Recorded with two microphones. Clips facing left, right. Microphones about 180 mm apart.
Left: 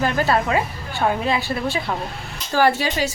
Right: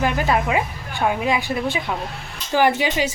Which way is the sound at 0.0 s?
15° right (ahead or behind).